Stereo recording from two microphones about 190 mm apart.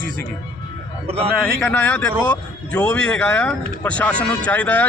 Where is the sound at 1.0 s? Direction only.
30° right (ahead or behind).